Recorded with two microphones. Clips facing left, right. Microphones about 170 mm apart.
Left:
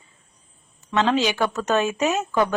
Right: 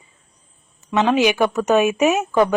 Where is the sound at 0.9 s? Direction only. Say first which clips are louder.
Right 4 dB; 15° right (ahead or behind).